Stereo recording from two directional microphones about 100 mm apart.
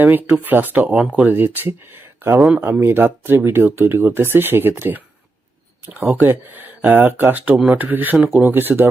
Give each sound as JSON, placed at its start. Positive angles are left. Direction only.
{"t": 0.0, "sound": "speech", "side_deg": -20}